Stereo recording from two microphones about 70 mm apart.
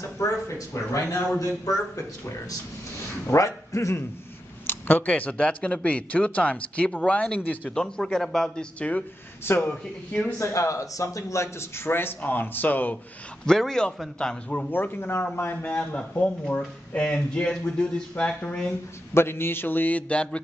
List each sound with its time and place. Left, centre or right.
0.0 s a man's voice: left
3.3 s a man's voice: left
4.6 s speech: left
7.7 s speech: centre
9.4 s a man's voice: left
10.4 s a man's voice: left
13.5 s speech: centre
14.7 s speech: left
15.5 s speech: centre
19.1 s speech: left; by 20.4 s centre